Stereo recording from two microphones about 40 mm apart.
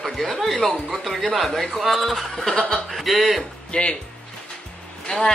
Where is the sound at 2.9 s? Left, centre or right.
Centre.